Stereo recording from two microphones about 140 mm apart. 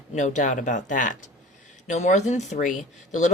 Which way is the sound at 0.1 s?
60° left (ahead or behind).